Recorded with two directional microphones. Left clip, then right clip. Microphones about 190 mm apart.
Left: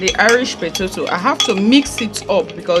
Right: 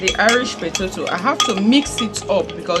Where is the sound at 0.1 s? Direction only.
40° left (ahead or behind).